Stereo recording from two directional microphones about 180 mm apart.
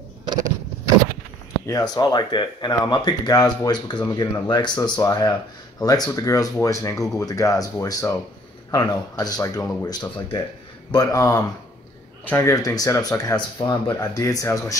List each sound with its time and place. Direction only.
1.7 s speech: 20° left (ahead or behind)